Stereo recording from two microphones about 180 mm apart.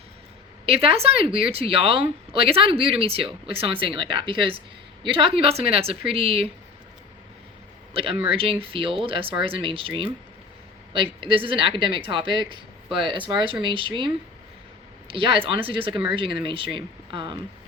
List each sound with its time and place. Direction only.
0.6 s speech: 35° right (ahead or behind)
8.3 s speech: 30° right (ahead or behind)